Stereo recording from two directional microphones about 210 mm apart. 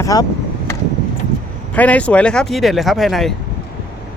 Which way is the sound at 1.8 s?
5° left (ahead or behind).